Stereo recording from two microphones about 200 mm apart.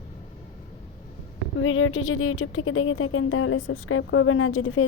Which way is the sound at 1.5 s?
90° left.